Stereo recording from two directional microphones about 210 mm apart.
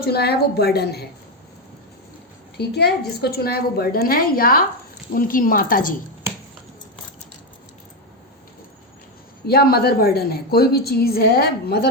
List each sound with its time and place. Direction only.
0.0 s a woman's voice: 50° left (ahead or behind)
2.6 s a woman's voice: 50° left (ahead or behind)
9.5 s a woman's voice: 45° left (ahead or behind)